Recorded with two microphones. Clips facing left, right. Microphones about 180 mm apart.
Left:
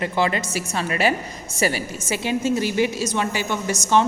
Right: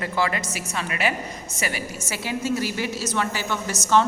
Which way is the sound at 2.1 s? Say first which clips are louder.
Left 5 dB; 20° left (ahead or behind).